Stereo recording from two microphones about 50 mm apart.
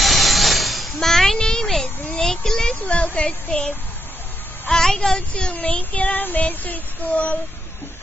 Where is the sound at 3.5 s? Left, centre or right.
Left.